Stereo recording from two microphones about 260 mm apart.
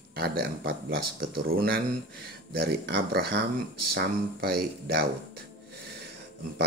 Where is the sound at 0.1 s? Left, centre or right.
Right.